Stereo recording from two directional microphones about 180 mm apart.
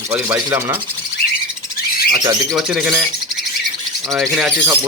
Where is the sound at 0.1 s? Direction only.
10° right (ahead or behind).